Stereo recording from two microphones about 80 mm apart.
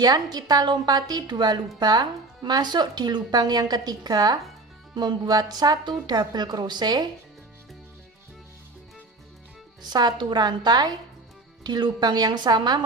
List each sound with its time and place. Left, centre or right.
0.0 s speech: right
9.9 s speech: right